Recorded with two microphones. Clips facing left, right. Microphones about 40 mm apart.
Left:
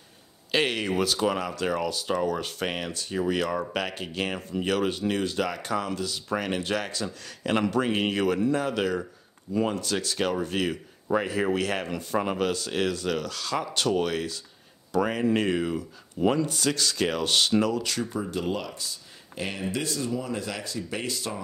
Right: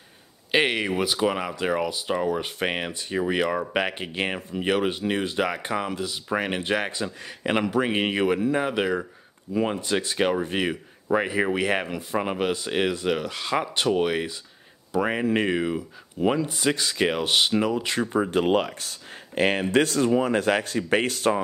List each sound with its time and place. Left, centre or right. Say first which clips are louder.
0.5 s speech: right 3 dB; right
18.2 s speech: right 8 dB; right